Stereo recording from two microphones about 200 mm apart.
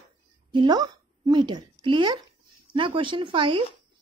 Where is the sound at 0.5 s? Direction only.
20° right (ahead or behind).